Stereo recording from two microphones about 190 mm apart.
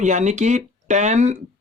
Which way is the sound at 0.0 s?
40° right (ahead or behind).